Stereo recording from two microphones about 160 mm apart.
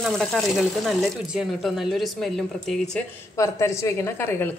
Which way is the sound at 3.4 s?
20° left (ahead or behind).